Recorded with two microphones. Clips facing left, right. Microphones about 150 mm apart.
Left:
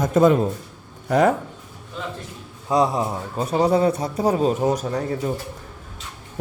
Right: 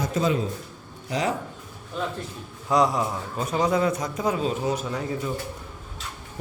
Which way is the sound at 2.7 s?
25° left (ahead or behind).